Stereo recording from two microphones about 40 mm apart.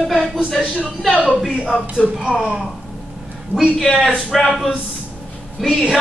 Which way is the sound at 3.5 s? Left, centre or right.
Centre.